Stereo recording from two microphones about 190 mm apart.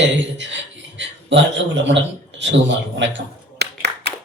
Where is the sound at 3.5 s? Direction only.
60° right (ahead or behind).